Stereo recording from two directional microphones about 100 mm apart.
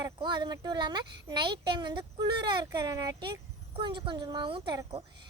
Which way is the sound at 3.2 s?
55° right (ahead or behind).